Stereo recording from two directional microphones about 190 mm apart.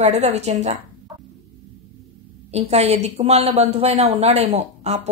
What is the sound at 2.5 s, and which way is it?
A woman's voice, 35° right (ahead or behind).